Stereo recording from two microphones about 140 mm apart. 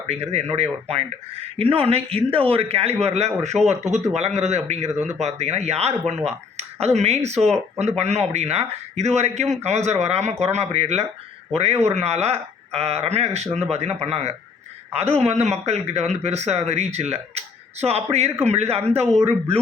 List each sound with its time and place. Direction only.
0.1 s speech: 50° right (ahead or behind)